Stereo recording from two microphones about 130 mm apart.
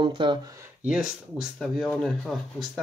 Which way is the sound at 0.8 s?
5° right (ahead or behind).